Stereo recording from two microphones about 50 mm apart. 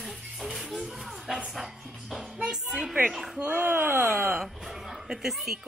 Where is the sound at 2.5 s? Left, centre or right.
Centre.